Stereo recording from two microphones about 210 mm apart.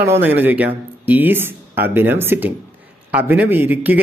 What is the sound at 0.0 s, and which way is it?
Speech, 10° right (ahead or behind).